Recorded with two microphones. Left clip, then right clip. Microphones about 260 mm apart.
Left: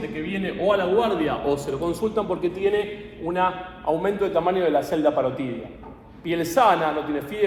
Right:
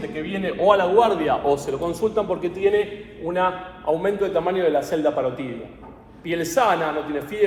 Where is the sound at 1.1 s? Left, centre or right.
Centre; by 5.5 s left.